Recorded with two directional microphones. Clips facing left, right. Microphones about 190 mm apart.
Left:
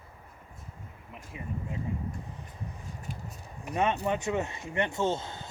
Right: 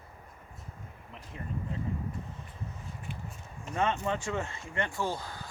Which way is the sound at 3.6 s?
15° left (ahead or behind).